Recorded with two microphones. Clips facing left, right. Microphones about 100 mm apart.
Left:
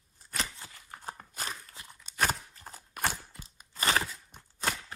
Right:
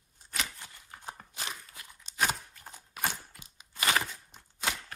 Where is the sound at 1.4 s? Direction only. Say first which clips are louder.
Left 1 dB; 45° left (ahead or behind).